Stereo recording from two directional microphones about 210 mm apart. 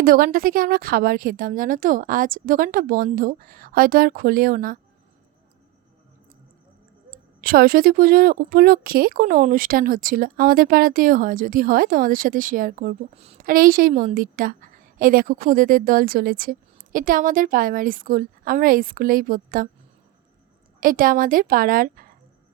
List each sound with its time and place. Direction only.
0.0 s speech: 45° right (ahead or behind)
7.4 s a woman's voice: 45° right (ahead or behind)
20.8 s a woman's voice: 40° right (ahead or behind)